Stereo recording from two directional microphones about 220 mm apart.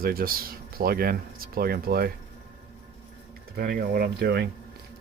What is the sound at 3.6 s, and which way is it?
Speech, 45° right (ahead or behind).